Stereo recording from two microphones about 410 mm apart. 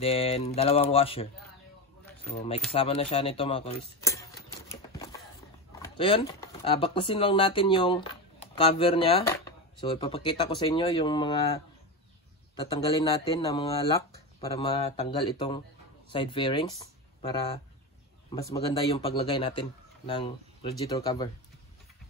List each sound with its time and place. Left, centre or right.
0.0 s speech: centre
4.0 s a sound: centre
5.7 s speech: centre